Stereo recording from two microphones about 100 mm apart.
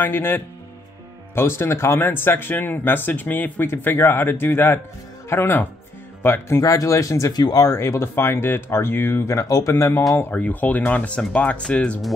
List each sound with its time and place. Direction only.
0.0 s speech: 20° left (ahead or behind)
6.6 s speech: 35° left (ahead or behind)
10.3 s speech: 15° left (ahead or behind)